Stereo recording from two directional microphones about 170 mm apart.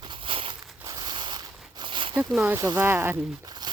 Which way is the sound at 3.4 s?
25° right (ahead or behind).